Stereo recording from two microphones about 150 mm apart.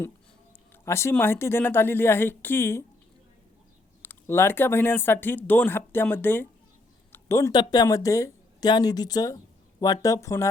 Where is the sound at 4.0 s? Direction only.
15° left (ahead or behind).